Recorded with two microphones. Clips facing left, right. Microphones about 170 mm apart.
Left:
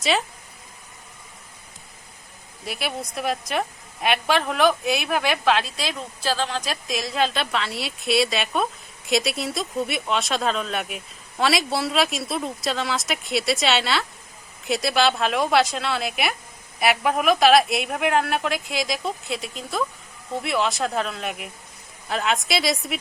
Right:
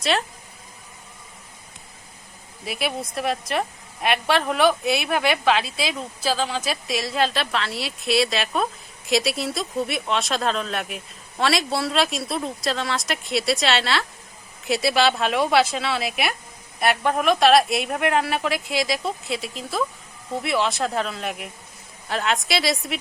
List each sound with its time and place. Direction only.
0.0 s a woman's voice: centre (ahead or behind)
2.6 s a woman's voice: centre (ahead or behind)